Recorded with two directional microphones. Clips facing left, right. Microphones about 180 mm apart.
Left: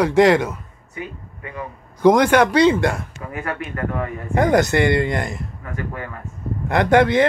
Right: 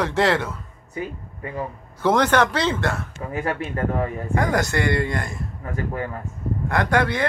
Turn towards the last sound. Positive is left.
turn(degrees=20)  # may be behind; listen again after turning